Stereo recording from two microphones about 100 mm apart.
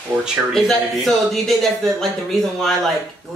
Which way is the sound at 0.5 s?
Centre (ahead or behind).